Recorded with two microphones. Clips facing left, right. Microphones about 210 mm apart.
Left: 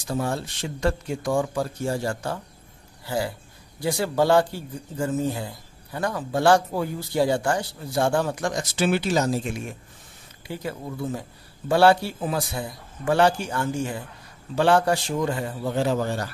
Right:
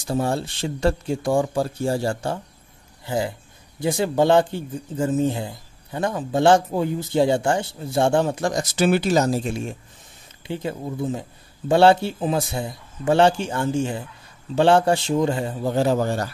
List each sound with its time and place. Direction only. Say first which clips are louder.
0.0 s speech: right 4 dB; 30° right (ahead or behind)
8.5 s speech: right 4 dB; 40° right (ahead or behind)
15.6 s speech: right 4 dB; 40° right (ahead or behind)